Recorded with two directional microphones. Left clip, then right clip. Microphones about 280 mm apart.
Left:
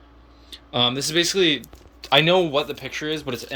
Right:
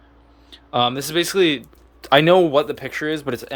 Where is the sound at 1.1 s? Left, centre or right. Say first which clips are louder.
Right 2 dB; centre.